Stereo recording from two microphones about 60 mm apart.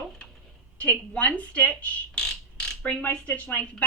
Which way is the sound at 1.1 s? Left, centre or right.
Left.